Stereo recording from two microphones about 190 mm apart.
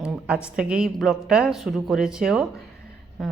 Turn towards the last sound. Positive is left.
turn(degrees=0)  # may be behind; listen again after turning